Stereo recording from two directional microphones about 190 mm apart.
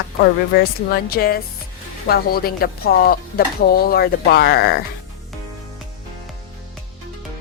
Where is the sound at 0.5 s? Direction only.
55° left (ahead or behind).